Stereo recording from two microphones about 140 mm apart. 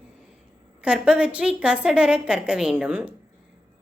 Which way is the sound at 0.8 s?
5° right (ahead or behind).